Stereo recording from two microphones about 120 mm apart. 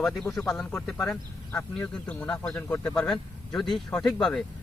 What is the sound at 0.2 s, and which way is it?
Speech, 5° left (ahead or behind).